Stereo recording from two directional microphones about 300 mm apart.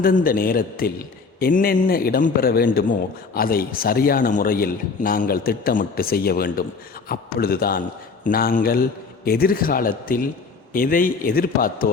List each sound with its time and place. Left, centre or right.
0.0 s a man's voice: left